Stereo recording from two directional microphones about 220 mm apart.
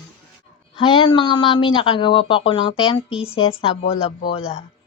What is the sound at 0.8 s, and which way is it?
Speech, 25° left (ahead or behind).